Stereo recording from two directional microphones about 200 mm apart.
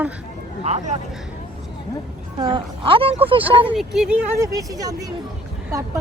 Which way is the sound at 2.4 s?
25° right (ahead or behind).